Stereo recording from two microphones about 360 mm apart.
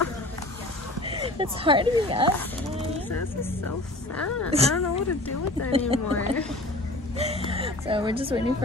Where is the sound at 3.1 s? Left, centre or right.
Left.